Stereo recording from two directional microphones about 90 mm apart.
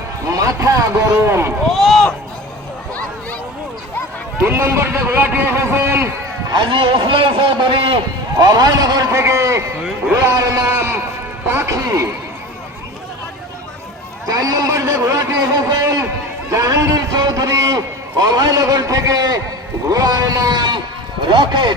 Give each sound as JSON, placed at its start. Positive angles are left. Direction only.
{"t": 0.3, "sound": "a man's voice", "side_deg": -40}
{"t": 1.6, "sound": "a sound", "side_deg": 0}
{"t": 4.4, "sound": "a man's voice", "side_deg": -25}
{"t": 6.5, "sound": "a man's voice", "side_deg": -65}
{"t": 8.4, "sound": "a man's voice", "side_deg": -50}
{"t": 9.0, "sound": "a man's voice", "side_deg": -35}
{"t": 14.3, "sound": "a man's voice", "side_deg": -40}